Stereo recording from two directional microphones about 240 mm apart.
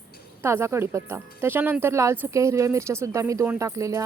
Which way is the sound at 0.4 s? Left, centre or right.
Centre.